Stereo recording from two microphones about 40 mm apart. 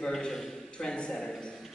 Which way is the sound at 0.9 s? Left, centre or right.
Left.